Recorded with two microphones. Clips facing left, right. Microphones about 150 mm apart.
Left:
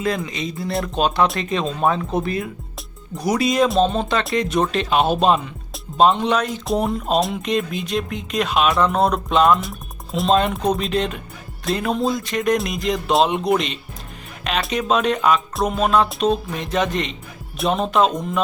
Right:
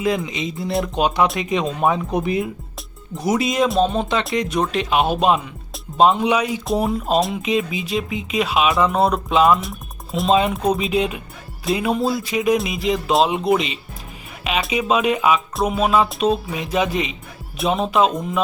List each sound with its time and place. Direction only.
0.0 s speech: 15° right (ahead or behind)